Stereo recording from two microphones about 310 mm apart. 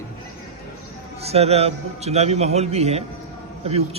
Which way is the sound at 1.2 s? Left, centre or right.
Centre.